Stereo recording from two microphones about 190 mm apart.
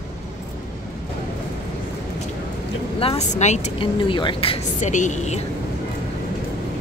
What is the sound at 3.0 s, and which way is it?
Speech, 35° left (ahead or behind).